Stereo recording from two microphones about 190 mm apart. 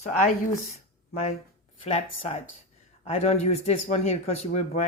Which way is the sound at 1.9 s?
35° left (ahead or behind).